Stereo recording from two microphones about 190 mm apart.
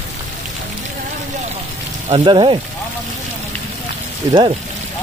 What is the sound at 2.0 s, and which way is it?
Speech, 25° right (ahead or behind).